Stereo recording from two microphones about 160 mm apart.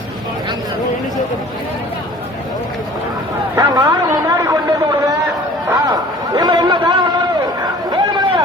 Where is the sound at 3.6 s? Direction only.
25° right (ahead or behind).